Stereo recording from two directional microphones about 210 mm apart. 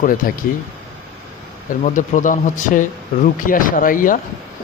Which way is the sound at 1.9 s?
40° left (ahead or behind).